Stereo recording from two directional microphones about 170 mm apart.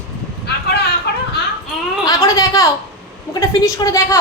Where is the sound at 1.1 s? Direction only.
75° left (ahead or behind).